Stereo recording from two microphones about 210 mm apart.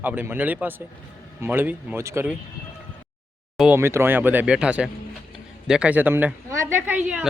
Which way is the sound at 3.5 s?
5° right (ahead or behind).